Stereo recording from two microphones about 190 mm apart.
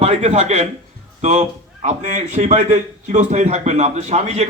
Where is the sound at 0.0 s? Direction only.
35° right (ahead or behind).